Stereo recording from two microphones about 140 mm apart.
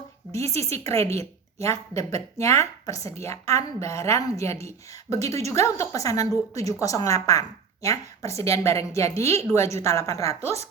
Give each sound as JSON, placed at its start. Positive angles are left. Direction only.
{"t": 0.3, "sound": "a woman's voice", "side_deg": 20}